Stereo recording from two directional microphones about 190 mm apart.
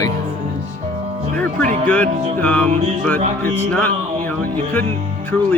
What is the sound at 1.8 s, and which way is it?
Speech, 10° left (ahead or behind).